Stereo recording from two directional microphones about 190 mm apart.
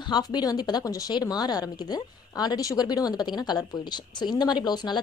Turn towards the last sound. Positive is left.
turn(degrees=20)  # may be behind; listen again after turning